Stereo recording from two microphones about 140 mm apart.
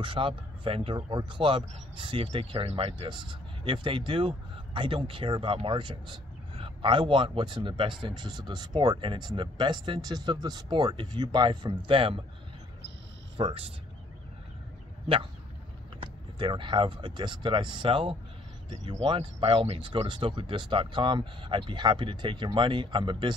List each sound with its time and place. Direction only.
0.0 s speech: 40° right (ahead or behind)
13.4 s speech: 40° right (ahead or behind)
16.0 s speech: 35° right (ahead or behind)